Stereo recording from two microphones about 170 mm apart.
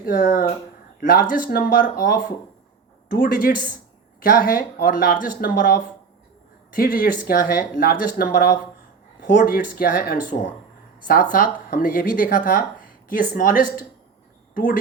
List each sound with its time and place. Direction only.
0.0 s speech: 60° left (ahead or behind)